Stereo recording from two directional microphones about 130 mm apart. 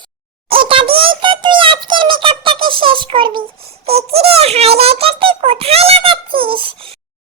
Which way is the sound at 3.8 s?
50° right (ahead or behind).